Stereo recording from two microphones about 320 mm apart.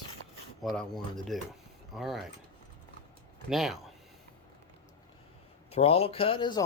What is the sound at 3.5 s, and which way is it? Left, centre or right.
Speech, centre.